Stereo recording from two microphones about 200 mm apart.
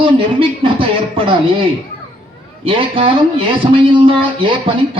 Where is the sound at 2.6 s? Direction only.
25° right (ahead or behind).